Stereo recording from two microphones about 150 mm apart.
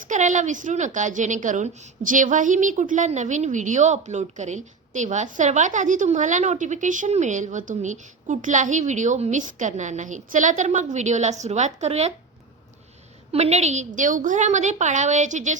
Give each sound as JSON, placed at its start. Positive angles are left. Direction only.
{"t": 0.1, "sound": "a woman's voice", "side_deg": -55}
{"t": 13.3, "sound": "a woman's voice", "side_deg": -45}